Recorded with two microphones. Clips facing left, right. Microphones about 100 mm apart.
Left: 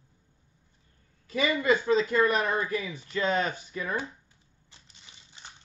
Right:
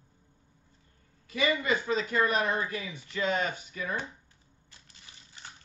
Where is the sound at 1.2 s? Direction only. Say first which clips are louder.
Left 3 dB; 35° left (ahead or behind).